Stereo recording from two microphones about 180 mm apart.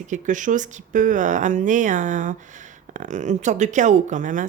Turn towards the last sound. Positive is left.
turn(degrees=-45)  # may be behind; listen again after turning